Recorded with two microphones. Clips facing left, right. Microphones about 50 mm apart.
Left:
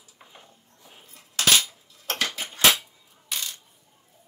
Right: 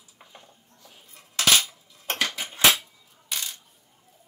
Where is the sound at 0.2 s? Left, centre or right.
Centre.